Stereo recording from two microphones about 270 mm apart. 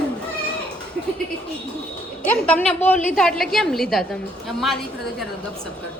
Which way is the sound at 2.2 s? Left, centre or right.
Centre.